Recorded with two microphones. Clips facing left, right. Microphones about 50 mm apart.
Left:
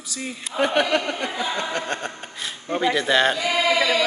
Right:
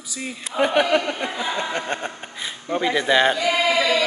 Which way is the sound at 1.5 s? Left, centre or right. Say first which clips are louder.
Right 1 dB; centre.